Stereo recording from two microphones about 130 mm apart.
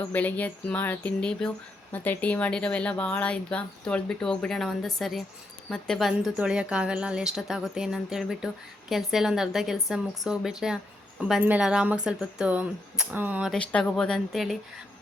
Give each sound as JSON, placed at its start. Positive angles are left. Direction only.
{"t": 0.1, "sound": "a woman's voice", "side_deg": 10}
{"t": 13.5, "sound": "a woman's voice", "side_deg": 10}